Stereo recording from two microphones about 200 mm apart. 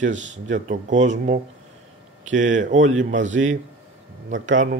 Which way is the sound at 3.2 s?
70° right (ahead or behind).